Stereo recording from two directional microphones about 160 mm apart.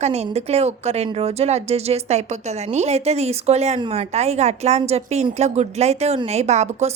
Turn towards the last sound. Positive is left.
turn(degrees=-45)  # may be behind; listen again after turning